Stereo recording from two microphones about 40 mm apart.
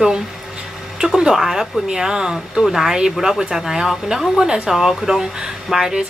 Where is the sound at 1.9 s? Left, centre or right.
Centre.